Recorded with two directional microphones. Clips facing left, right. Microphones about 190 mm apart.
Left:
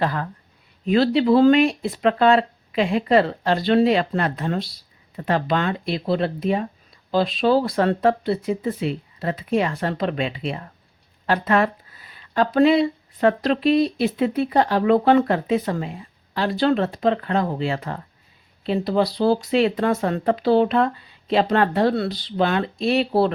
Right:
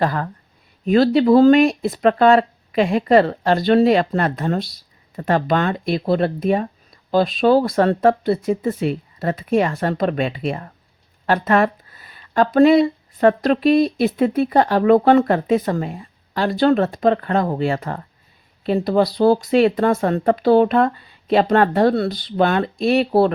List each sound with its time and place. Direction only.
0.0 s speech: 45° right (ahead or behind)